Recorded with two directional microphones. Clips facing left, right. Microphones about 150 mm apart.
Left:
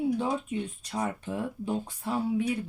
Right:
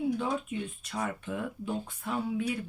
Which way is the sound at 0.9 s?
30° left (ahead or behind).